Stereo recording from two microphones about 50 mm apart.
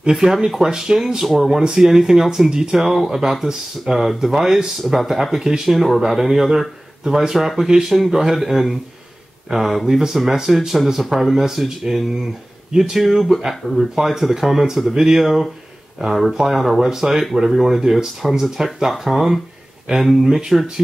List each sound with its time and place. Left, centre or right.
0.1 s speech: centre
13.0 s speech: centre